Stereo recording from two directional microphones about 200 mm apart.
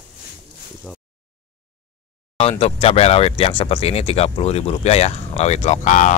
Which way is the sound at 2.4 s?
30° left (ahead or behind).